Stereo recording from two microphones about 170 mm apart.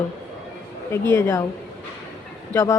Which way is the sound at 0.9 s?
15° left (ahead or behind).